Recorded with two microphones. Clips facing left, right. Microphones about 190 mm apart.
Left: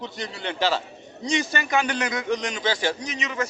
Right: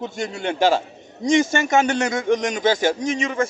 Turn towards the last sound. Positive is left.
turn(degrees=-50)  # may be behind; listen again after turning